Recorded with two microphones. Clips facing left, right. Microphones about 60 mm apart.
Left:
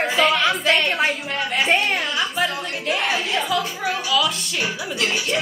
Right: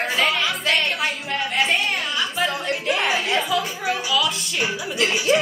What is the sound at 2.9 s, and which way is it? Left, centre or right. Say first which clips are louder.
Music: even; centre.